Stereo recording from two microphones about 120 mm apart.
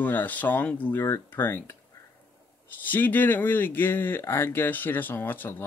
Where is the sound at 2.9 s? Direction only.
15° left (ahead or behind).